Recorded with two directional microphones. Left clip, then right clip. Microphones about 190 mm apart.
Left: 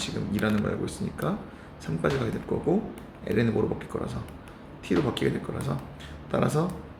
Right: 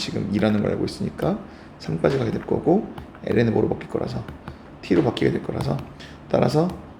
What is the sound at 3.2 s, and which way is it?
Speech, 20° right (ahead or behind).